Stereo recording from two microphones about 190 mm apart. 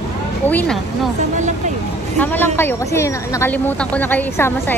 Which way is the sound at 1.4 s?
40° right (ahead or behind).